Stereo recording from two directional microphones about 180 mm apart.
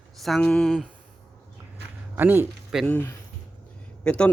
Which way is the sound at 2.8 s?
10° left (ahead or behind).